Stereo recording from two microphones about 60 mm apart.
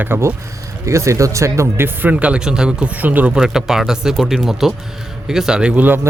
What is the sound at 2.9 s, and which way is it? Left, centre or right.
Speech, right.